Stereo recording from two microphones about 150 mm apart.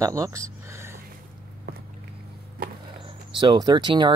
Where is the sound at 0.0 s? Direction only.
20° right (ahead or behind).